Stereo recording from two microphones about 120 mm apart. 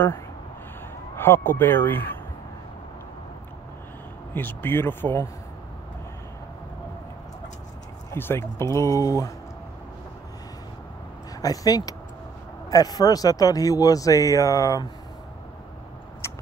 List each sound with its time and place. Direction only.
1.1 s a man's voice: 20° left (ahead or behind)
4.3 s speech: 15° left (ahead or behind)
8.1 s speech: 20° left (ahead or behind)
11.4 s speech: 30° left (ahead or behind)